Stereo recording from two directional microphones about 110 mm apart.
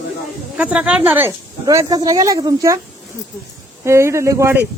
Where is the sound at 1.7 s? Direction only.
35° right (ahead or behind).